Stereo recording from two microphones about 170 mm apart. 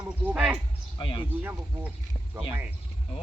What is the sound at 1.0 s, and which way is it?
Speech, 30° left (ahead or behind).